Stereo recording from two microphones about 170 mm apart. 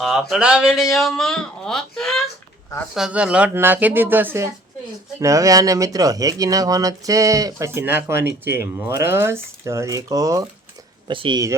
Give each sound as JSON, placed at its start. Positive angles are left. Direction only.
{"t": 0.0, "sound": "speech", "side_deg": 0}